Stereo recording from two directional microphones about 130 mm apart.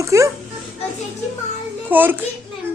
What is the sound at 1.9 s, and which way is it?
Speech, 15° right (ahead or behind).